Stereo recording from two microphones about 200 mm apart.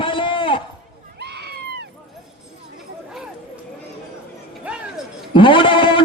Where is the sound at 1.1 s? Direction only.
55° right (ahead or behind).